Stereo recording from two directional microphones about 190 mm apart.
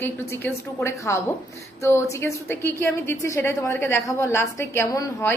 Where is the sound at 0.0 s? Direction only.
10° left (ahead or behind).